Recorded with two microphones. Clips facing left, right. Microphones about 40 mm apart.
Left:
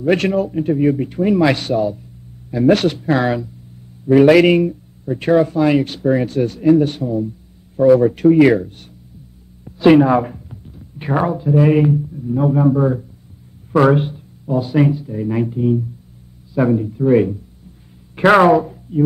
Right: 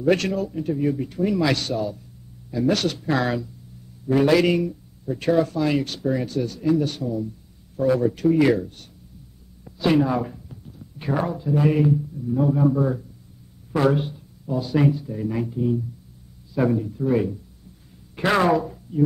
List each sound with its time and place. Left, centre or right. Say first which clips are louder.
0.0 s a man's voice: left 5 dB; left
0.5 s speech: left 8 dB; left
1.0 s speech: left 7 dB; left
2.5 s a man's voice: left 8 dB; left
3.1 s speech: left 5 dB; centre
4.1 s a man's voice: left 8 dB; left
6.0 s a man's voice: left 7 dB; left
9.8 s a sound: left 9 dB; left
11.0 s a man's voice: left 6 dB; left
13.7 s a sound: left 7 dB; left
14.9 s speech: left 4 dB; centre
15.2 s a man's voice: left 6 dB; left
16.5 s speech: left 5 dB; centre
17.1 s a man's voice: left 9 dB; left